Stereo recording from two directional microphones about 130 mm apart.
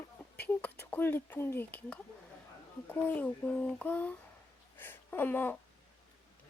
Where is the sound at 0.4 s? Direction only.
10° left (ahead or behind).